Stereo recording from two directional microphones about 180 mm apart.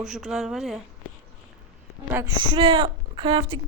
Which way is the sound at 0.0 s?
5° right (ahead or behind).